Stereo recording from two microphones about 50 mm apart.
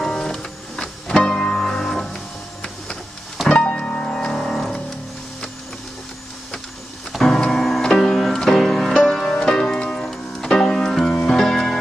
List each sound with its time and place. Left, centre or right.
0.0 s music: centre
1.5 s music: centre
3.4 s music: left; by 4.8 s centre
7.1 s music: centre
7.3 s music: centre